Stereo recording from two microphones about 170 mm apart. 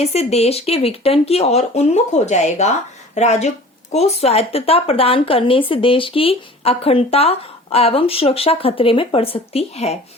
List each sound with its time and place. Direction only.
0.0 s speech: 40° left (ahead or behind)